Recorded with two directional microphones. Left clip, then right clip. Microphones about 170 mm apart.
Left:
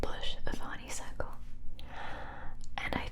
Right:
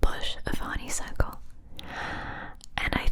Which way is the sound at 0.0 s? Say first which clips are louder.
Right 7 dB; 40° right (ahead or behind).